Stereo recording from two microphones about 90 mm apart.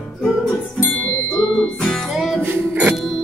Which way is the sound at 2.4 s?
25° right (ahead or behind).